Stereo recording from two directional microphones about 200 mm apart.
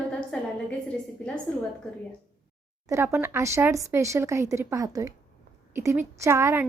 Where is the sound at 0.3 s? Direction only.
5° left (ahead or behind).